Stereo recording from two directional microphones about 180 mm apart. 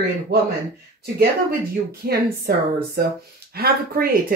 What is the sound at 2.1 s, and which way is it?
Speech, 60° right (ahead or behind).